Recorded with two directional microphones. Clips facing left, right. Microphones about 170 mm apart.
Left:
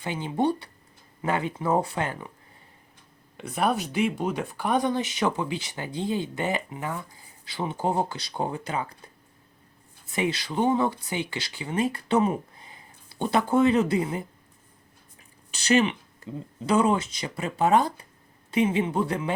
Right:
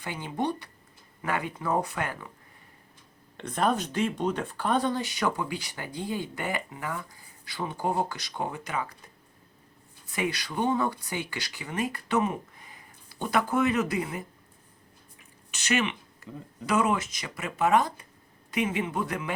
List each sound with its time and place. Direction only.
0.0 s speech: 20° left (ahead or behind)
3.3 s speech: 10° left (ahead or behind); by 9.0 s 30° left (ahead or behind)
10.1 s speech: 25° left (ahead or behind)
15.5 s speech: 35° left (ahead or behind)